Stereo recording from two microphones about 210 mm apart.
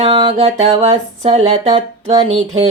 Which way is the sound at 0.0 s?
25° right (ahead or behind).